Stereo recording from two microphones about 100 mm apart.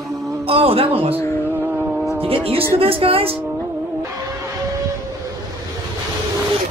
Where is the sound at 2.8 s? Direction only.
70° right (ahead or behind).